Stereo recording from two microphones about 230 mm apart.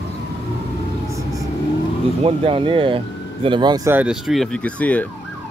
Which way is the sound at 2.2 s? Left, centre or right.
Right.